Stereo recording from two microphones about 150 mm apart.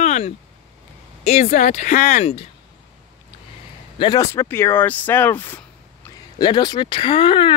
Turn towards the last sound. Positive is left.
turn(degrees=35)  # may be behind; listen again after turning